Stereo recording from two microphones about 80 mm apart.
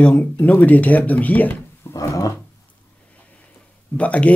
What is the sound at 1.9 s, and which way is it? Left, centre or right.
Dog, left.